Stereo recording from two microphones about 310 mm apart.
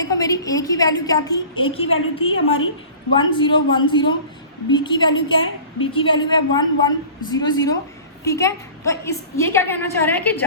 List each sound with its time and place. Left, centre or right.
0.0 s a woman's voice: centre
2.3 s a woman's voice: left
3.2 s a woman's voice: centre